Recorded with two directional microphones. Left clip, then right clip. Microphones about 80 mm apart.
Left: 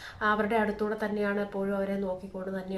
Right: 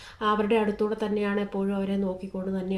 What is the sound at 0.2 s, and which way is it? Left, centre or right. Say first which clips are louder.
Speech: right 2 dB; right.